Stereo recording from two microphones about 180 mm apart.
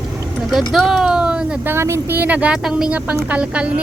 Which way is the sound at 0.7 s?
Centre (ahead or behind).